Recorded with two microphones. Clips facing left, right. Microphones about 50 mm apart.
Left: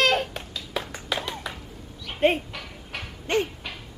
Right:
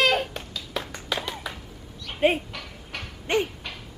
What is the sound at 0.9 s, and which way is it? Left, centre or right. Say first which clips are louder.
Clapping: even; centre.